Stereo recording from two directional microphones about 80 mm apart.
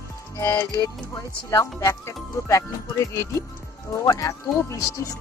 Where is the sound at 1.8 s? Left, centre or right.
Left.